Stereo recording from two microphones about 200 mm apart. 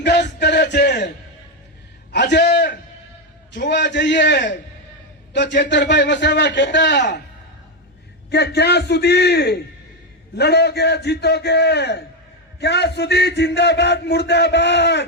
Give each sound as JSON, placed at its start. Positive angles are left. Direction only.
{"t": 0.0, "sound": "music", "side_deg": 55}
{"t": 2.1, "sound": "a sound", "side_deg": 60}
{"t": 3.5, "sound": "a man's voice", "side_deg": 60}
{"t": 8.3, "sound": "a man's voice", "side_deg": 55}